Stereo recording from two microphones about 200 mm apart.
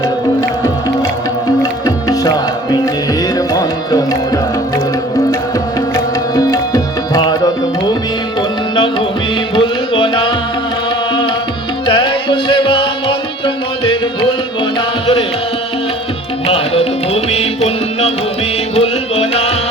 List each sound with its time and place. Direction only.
1.8 s music: 20° left (ahead or behind)
3.3 s music: 20° left (ahead or behind)
6.3 s tabla: 20° left (ahead or behind)
8.7 s music: 25° left (ahead or behind)
11.9 s music: 25° left (ahead or behind)
18.8 s music: 30° left (ahead or behind)